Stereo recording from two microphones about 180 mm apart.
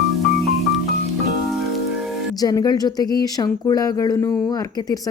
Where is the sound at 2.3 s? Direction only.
20° left (ahead or behind).